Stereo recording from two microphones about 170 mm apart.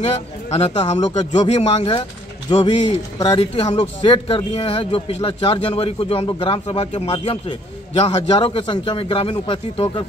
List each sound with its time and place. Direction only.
0.0 s speech: 40° left (ahead or behind)